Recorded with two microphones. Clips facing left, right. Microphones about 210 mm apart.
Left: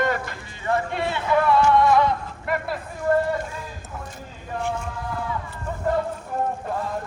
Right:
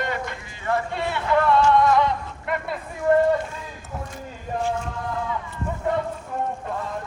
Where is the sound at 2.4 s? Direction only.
5° left (ahead or behind).